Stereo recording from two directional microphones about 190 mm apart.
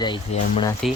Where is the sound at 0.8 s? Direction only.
Centre (ahead or behind).